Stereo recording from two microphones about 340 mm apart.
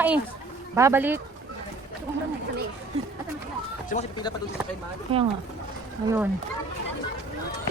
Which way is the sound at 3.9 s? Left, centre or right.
Centre.